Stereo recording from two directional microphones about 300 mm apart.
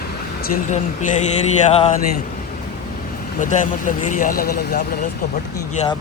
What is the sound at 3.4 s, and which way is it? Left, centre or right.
Speech, left.